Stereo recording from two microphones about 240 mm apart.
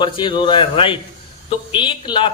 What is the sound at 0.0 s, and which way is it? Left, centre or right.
A woman's voice, centre.